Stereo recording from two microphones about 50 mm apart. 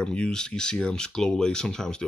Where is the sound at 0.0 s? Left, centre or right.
Centre.